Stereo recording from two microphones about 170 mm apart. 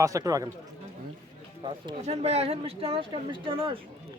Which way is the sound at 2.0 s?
40° right (ahead or behind).